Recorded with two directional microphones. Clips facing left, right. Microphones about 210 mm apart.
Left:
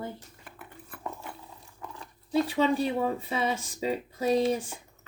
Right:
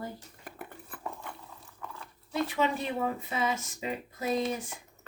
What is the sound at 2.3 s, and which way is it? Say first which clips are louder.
Speech: left 5 dB; 30° left (ahead or behind).